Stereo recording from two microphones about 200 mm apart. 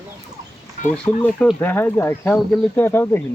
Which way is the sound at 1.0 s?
5° left (ahead or behind).